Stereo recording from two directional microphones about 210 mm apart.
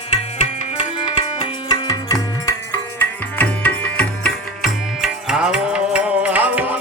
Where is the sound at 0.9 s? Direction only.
20° left (ahead or behind).